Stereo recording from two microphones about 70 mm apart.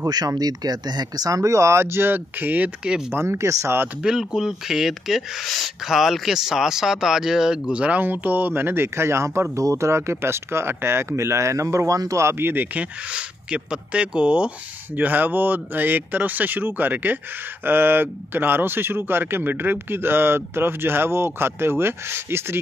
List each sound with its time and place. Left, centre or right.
0.0 s speech: right
2.8 s speech: centre
3.1 s speech: right
4.0 s speech: centre; by 12.6 s right
12.7 s speech: centre; by 22.6 s right